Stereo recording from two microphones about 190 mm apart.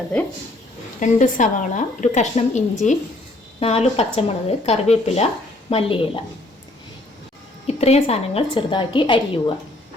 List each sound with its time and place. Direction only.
0.9 s a woman's voice: 40° left (ahead or behind)
7.7 s a woman's voice: 35° left (ahead or behind)